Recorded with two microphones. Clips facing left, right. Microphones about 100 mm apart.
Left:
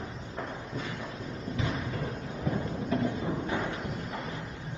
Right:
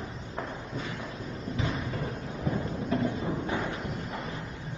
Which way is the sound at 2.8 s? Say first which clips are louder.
Right 1 dB; 30° right (ahead or behind).